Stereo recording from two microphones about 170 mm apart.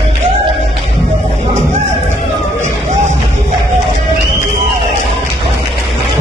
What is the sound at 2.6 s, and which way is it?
Music, 45° right (ahead or behind).